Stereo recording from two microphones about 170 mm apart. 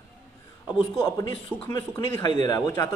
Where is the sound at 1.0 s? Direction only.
25° left (ahead or behind).